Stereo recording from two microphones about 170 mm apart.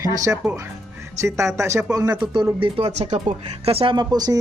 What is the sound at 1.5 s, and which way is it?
Speech, 15° right (ahead or behind).